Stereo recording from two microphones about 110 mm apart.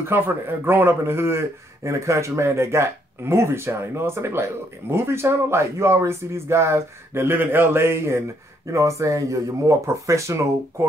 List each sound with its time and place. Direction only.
0.0 s speech: 20° right (ahead or behind)